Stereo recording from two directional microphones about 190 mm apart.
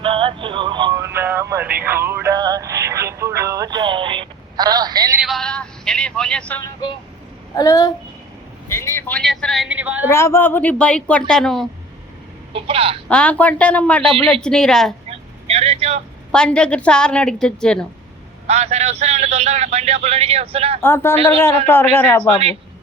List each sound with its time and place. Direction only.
0.0 s speech: 30° right (ahead or behind)
5.2 s speech: centre (ahead or behind)
7.5 s a woman's voice: 20° left (ahead or behind); by 10.1 s 10° right (ahead or behind)
10.1 s speech: 15° left (ahead or behind)
12.5 s a woman's voice: 30° right (ahead or behind)
13.1 s a woman's voice: 5° left (ahead or behind)
15.4 s vehicle: 35° right (ahead or behind)
16.3 s a woman's voice: 5° left (ahead or behind)
18.4 s a man's voice: 35° right (ahead or behind)
20.8 s speech: 10° left (ahead or behind)